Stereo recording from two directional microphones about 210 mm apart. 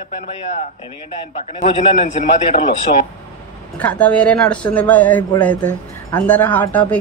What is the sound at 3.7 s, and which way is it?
Speech, 5° left (ahead or behind).